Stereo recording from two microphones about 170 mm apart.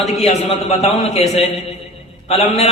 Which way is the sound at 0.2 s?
40° left (ahead or behind).